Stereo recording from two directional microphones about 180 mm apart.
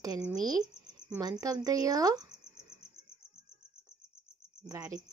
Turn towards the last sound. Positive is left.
turn(degrees=-20)  # may be behind; listen again after turning